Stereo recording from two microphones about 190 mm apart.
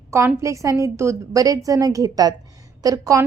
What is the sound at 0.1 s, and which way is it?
A woman's voice, 15° right (ahead or behind).